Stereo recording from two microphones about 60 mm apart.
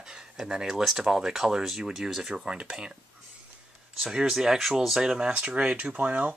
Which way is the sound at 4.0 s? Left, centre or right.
Centre.